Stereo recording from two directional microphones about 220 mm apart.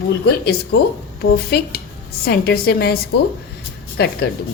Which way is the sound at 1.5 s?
45° left (ahead or behind).